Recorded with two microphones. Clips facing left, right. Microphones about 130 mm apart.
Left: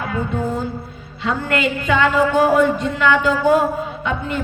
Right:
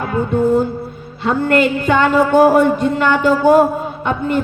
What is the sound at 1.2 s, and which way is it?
A woman's voice, 50° right (ahead or behind).